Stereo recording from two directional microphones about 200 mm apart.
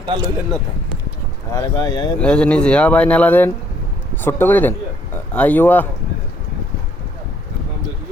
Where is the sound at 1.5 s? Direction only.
15° left (ahead or behind).